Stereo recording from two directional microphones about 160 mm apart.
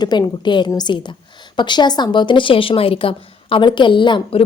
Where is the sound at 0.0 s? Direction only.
25° left (ahead or behind).